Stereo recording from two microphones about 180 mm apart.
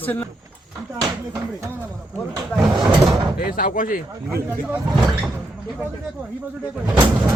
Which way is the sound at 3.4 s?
50° left (ahead or behind).